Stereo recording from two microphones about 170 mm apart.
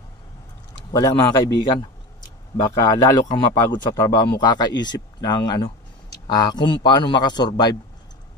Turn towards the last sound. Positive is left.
turn(degrees=25)  # may be behind; listen again after turning